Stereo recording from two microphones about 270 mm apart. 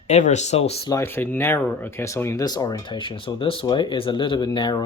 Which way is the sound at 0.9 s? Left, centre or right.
Centre.